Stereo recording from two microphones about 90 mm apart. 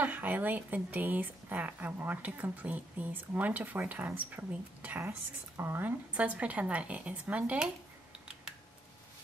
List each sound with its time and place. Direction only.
0.0 s a woman's voice: 20° right (ahead or behind)